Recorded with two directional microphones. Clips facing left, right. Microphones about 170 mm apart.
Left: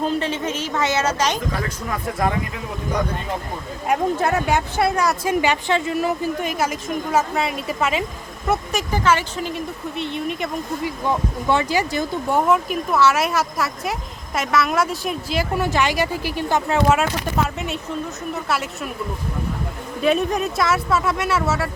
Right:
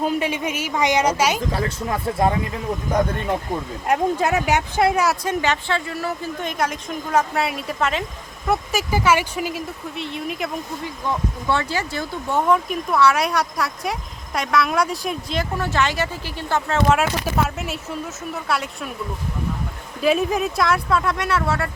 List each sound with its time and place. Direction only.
0.0 s a woman's voice: 10° right (ahead or behind)
1.5 s speech: 25° right (ahead or behind)
2.9 s speech: 50° right (ahead or behind)
4.2 s a woman's voice: 10° right (ahead or behind)
5.2 s speech: 10° left (ahead or behind)
6.4 s speech: 5° left (ahead or behind)
8.4 s speech: 5° right (ahead or behind)
10.8 s speech: 15° left (ahead or behind)
16.9 s speech: centre (ahead or behind)
20.0 s speech: centre (ahead or behind)